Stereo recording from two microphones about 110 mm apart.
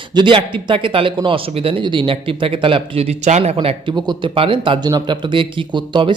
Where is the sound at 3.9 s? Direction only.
40° right (ahead or behind).